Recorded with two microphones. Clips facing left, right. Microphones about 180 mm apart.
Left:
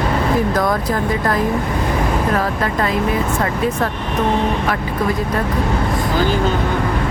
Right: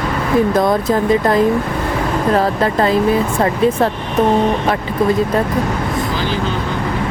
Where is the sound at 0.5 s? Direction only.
25° right (ahead or behind).